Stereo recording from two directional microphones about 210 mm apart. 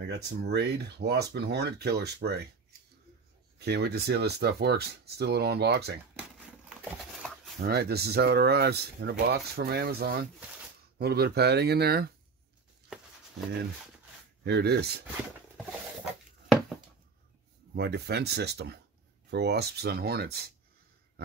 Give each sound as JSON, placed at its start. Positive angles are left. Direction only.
{"t": 0.0, "sound": "speech", "side_deg": -50}
{"t": 3.5, "sound": "speech", "side_deg": -50}
{"t": 6.7, "sound": "a sound", "side_deg": 0}
{"t": 7.6, "sound": "speech", "side_deg": -50}
{"t": 14.4, "sound": "speech", "side_deg": -50}
{"t": 17.7, "sound": "speech", "side_deg": -50}